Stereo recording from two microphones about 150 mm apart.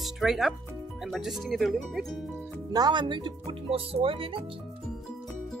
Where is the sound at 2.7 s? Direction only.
25° right (ahead or behind).